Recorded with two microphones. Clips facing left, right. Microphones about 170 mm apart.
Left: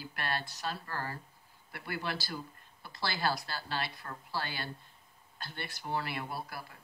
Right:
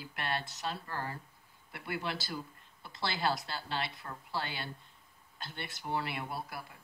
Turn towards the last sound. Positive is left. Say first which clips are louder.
# even
turn(degrees=-20)  # may be behind; listen again after turning